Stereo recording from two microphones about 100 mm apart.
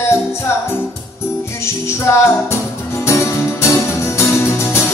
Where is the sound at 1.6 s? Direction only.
25° left (ahead or behind).